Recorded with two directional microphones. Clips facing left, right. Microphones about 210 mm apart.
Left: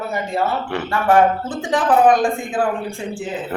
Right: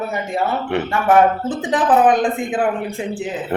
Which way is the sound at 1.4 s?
20° right (ahead or behind).